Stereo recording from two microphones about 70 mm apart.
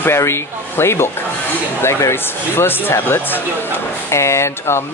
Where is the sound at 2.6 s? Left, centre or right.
Left.